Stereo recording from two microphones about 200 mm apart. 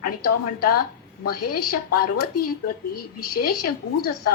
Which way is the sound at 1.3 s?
50° left (ahead or behind).